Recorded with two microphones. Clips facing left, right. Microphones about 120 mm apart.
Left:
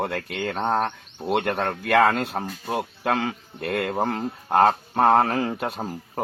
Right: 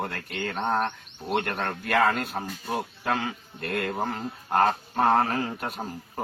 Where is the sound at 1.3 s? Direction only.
70° left (ahead or behind); by 5.7 s 85° left.